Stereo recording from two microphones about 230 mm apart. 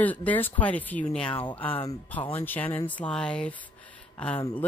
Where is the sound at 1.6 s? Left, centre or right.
Left.